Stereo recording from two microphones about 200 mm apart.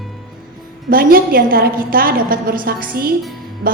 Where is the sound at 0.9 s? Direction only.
45° right (ahead or behind).